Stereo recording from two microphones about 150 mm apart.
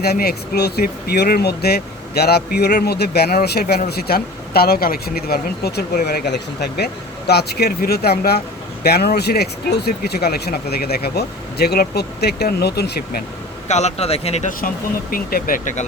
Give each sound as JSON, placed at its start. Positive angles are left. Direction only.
{"t": 0.0, "sound": "speech", "side_deg": 90}
{"t": 13.7, "sound": "speech", "side_deg": 50}
{"t": 15.1, "sound": "speech", "side_deg": 75}